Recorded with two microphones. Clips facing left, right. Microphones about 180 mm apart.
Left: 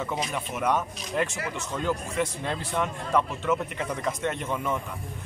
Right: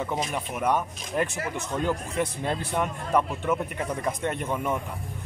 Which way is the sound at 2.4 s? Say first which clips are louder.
Right 1 dB; 15° right (ahead or behind).